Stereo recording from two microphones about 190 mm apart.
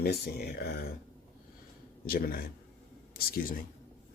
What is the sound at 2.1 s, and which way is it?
Speech, 50° left (ahead or behind).